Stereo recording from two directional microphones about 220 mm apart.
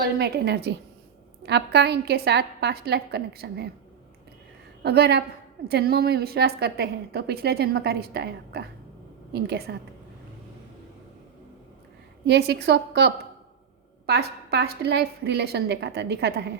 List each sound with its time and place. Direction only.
0.0 s a woman's voice: 50° right (ahead or behind)
4.8 s a woman's voice: 50° right (ahead or behind)
12.2 s a woman's voice: 50° right (ahead or behind)